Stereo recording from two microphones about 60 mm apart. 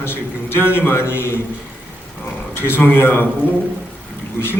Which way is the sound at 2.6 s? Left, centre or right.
Left.